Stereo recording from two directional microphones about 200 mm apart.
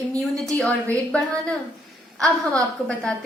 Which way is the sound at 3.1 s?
5° left (ahead or behind).